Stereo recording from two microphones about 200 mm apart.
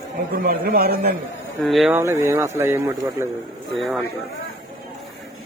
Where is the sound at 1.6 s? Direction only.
Centre (ahead or behind).